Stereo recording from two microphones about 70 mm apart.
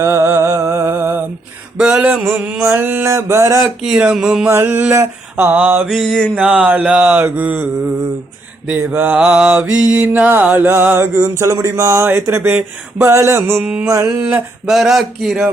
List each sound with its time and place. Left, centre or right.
0.0 s music: right
1.8 s mantra: centre
2.6 s mantra: right
3.6 s mantra: centre
4.4 s mantra: right
5.9 s mantra: centre
6.4 s mantra: centre
7.2 s mantra: right
8.7 s mantra: right
9.1 s mantra: centre; by 13.6 s right
13.6 s mantra: right
13.8 s mantra: right
14.2 s mantra: right
14.7 s a man's voice: centre